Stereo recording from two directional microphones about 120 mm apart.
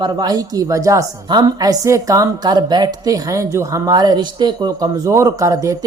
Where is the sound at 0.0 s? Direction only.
35° right (ahead or behind).